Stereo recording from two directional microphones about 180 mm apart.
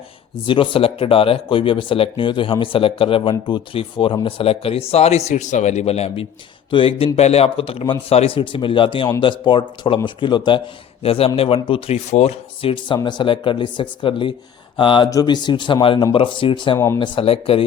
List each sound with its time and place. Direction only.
0.4 s speech: 30° left (ahead or behind)
16.7 s speech: 15° left (ahead or behind)
17.0 s speech: 30° left (ahead or behind)